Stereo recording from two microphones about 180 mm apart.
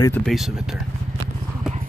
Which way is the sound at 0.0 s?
10° left (ahead or behind).